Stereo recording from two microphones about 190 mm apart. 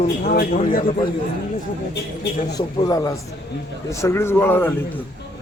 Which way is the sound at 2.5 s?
20° left (ahead or behind).